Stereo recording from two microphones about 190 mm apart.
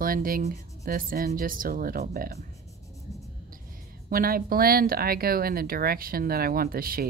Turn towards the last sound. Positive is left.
turn(degrees=-50)  # may be behind; listen again after turning